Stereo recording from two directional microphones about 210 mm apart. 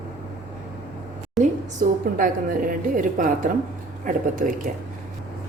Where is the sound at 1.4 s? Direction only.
Centre (ahead or behind).